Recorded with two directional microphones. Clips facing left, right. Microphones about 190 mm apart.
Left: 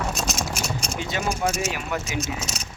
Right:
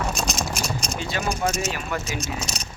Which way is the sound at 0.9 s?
20° left (ahead or behind).